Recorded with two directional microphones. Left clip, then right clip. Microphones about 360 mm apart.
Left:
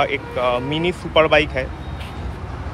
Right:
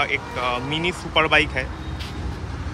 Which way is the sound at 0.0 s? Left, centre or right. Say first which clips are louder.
Left 3 dB; centre.